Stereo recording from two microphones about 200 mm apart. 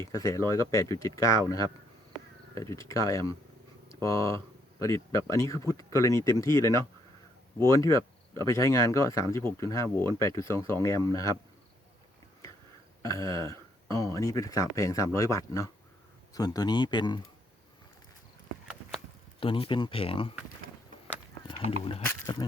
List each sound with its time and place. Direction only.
0.0 s speech: 15° left (ahead or behind)
13.0 s speech: 15° left (ahead or behind)
19.4 s speech: 25° left (ahead or behind)